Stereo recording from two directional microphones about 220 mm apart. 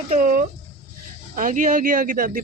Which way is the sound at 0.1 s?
40° right (ahead or behind).